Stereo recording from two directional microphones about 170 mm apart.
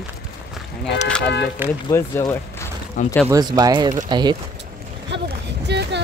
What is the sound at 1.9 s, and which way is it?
Speech, 15° left (ahead or behind).